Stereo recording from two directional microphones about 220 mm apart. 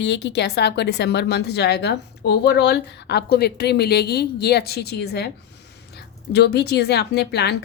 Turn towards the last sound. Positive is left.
turn(degrees=50)  # may be behind; listen again after turning